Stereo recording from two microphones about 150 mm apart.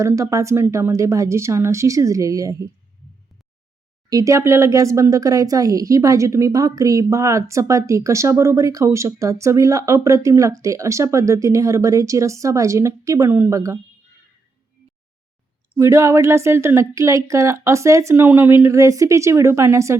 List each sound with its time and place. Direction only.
0.0 s speech: 20° right (ahead or behind)
4.1 s speech: 20° right (ahead or behind)
15.7 s speech: 20° right (ahead or behind)